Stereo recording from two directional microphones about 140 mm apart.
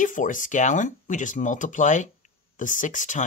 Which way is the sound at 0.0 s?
70° left (ahead or behind).